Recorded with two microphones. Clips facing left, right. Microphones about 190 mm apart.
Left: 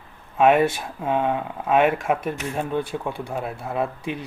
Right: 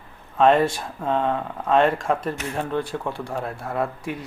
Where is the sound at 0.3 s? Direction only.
5° left (ahead or behind).